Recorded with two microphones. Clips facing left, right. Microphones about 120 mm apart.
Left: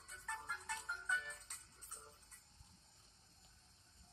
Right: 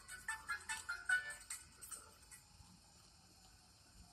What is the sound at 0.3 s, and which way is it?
Music, 30° left (ahead or behind).